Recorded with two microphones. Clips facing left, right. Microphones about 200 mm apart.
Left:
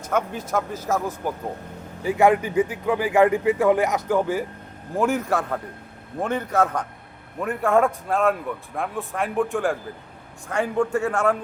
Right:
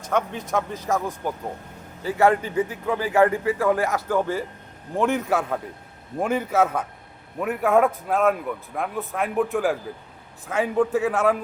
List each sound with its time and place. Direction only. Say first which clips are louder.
0.1 s a man's voice: even; 5° left (ahead or behind)
2.0 s a man's voice: left 2 dB; 15° left (ahead or behind)
4.9 s a man's voice: even; centre (ahead or behind)